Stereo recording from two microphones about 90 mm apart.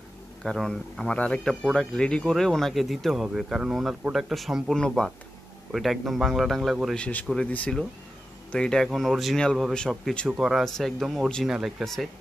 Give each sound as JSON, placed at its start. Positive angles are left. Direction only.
{"t": 0.4, "sound": "speech", "side_deg": 5}
{"t": 7.0, "sound": "speech", "side_deg": 15}